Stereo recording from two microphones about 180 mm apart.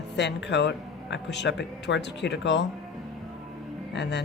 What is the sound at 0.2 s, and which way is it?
A woman's voice, 75° left (ahead or behind).